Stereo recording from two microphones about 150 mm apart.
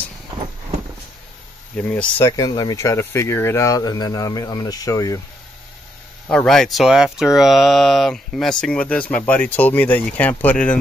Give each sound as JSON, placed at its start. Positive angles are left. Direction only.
{"t": 1.8, "sound": "speech", "side_deg": 10}
{"t": 2.2, "sound": "speech", "side_deg": 25}
{"t": 6.2, "sound": "speech", "side_deg": 5}